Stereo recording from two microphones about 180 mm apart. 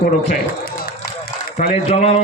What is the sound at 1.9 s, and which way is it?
Speech, 35° left (ahead or behind).